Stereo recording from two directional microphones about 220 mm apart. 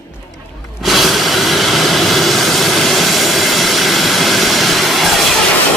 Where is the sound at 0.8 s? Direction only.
Centre (ahead or behind).